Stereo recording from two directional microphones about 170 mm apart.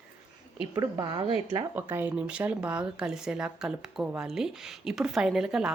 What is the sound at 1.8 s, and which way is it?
Speech, 10° right (ahead or behind).